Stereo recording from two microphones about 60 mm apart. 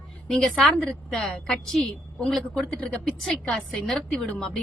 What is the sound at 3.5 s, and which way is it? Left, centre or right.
Speech, centre.